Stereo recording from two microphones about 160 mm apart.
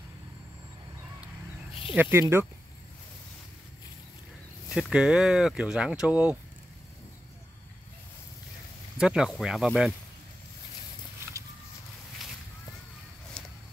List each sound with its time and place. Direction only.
2.0 s speech: 15° right (ahead or behind)
4.7 s speech: 5° right (ahead or behind)
8.9 s speech: 5° right (ahead or behind)